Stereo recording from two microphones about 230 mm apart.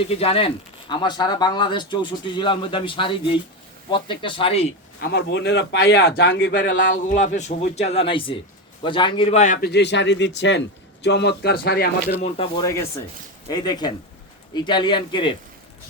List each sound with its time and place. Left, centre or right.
0.0 s speech: left
4.9 s speech: left
6.6 s speech: left
12.2 s speech: left